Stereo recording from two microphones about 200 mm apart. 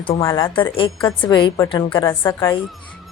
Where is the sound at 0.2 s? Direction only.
15° left (ahead or behind).